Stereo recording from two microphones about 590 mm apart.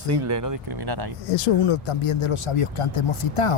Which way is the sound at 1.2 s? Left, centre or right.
Left.